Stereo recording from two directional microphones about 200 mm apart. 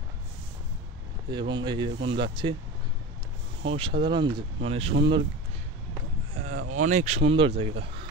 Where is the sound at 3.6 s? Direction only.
30° right (ahead or behind).